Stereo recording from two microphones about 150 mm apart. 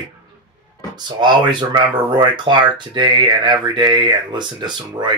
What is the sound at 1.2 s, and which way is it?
Speech, 30° right (ahead or behind).